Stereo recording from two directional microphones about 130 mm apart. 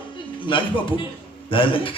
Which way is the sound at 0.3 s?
40° left (ahead or behind).